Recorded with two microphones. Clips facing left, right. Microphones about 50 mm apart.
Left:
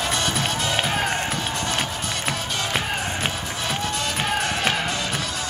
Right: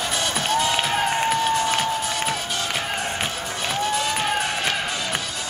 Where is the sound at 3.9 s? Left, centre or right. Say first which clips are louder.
Right 3 dB; centre.